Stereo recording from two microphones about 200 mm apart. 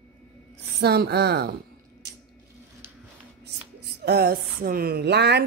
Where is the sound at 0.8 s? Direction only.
55° right (ahead or behind).